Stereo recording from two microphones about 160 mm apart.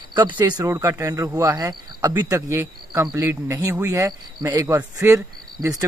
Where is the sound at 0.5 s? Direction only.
20° right (ahead or behind).